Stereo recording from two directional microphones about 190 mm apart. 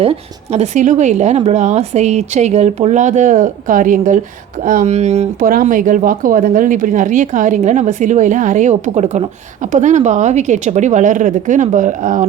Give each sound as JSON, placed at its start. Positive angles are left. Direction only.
{"t": 0.0, "sound": "speech", "side_deg": -35}